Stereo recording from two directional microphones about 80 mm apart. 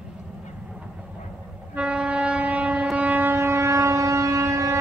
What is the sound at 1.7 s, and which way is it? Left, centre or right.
Music, centre.